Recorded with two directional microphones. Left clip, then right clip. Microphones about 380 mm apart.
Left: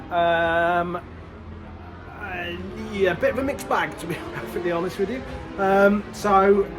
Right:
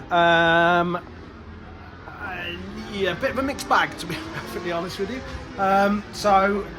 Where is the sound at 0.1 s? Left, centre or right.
Right.